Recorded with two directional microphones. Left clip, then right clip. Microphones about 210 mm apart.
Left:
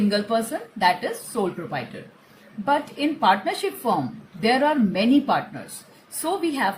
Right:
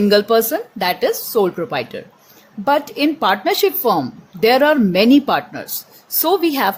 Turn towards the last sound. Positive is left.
turn(degrees=-45)  # may be behind; listen again after turning